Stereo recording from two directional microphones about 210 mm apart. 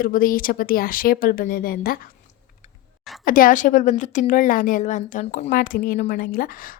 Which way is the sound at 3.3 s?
40° left (ahead or behind).